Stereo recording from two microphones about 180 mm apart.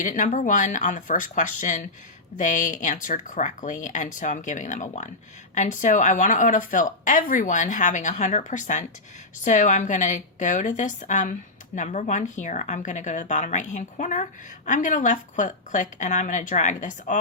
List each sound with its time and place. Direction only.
0.0 s a woman's voice: 45° left (ahead or behind)